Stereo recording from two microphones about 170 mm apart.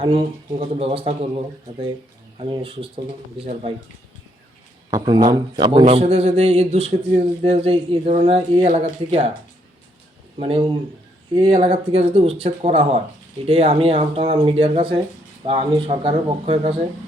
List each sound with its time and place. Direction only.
0.0 s speech: 30° right (ahead or behind)
2.4 s speech: 35° right (ahead or behind)
4.9 s a man's voice: 20° right (ahead or behind)
5.8 s speech: 35° right (ahead or behind)
10.3 s speech: 30° right (ahead or behind)